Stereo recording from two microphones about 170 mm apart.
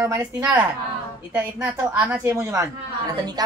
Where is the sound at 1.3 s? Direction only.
15° right (ahead or behind).